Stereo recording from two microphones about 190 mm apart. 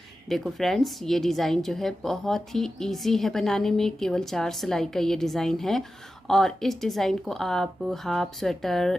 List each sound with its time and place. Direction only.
0.3 s a woman's voice: centre (ahead or behind)